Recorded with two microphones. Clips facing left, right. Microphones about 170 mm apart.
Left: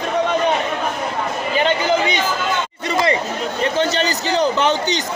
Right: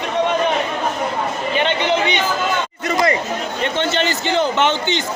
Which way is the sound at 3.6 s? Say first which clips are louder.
Left 1 dB; 35° left (ahead or behind).